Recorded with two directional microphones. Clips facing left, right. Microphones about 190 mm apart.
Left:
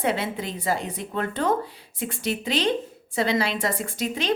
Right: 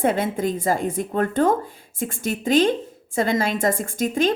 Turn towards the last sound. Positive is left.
turn(degrees=-50)  # may be behind; listen again after turning